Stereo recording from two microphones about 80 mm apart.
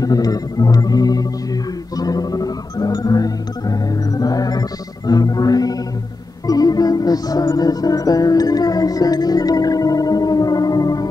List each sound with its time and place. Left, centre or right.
0.0 s music: left